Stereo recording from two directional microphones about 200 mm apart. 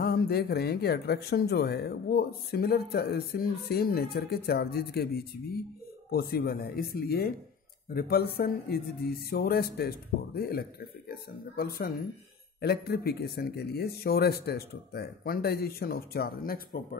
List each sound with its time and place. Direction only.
0.0 s speech: 50° left (ahead or behind)